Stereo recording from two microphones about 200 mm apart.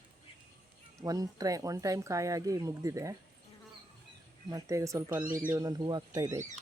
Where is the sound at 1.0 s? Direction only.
20° right (ahead or behind).